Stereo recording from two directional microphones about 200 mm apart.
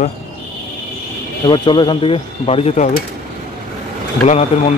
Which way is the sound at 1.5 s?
25° left (ahead or behind).